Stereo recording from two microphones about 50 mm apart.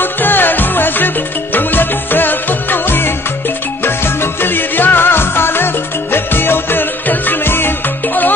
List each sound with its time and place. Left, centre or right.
0.0 s music: left